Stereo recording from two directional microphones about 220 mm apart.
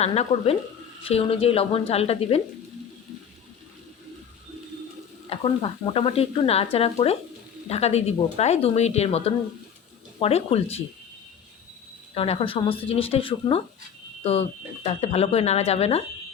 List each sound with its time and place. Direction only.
0.0 s speech: 30° left (ahead or behind)
5.3 s speech: 25° left (ahead or behind)
12.1 s speech: 25° left (ahead or behind)
14.8 s speech: 30° left (ahead or behind)